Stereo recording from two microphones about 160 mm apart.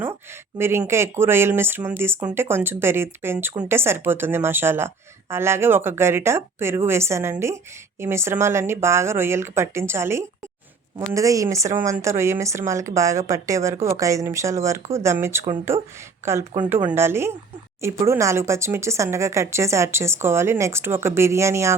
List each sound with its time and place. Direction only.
0.6 s a woman's voice: 15° right (ahead or behind)